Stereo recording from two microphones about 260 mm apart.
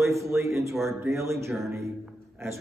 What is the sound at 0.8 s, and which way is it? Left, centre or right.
Speech, centre.